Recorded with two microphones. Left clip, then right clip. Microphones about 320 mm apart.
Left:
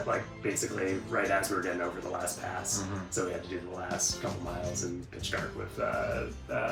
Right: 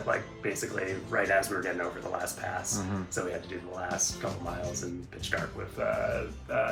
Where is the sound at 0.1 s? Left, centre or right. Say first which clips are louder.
Even; centre.